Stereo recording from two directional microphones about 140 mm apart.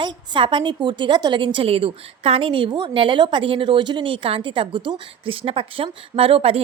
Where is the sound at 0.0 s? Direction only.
35° right (ahead or behind).